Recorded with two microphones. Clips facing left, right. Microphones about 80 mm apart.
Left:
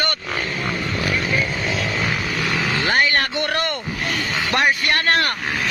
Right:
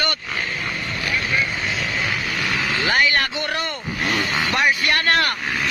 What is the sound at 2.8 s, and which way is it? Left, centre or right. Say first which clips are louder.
Speech: even; left.